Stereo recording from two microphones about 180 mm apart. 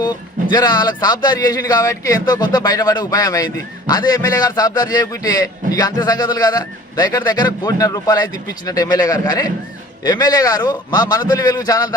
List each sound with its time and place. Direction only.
0.0 s a man's voice: 25° left (ahead or behind)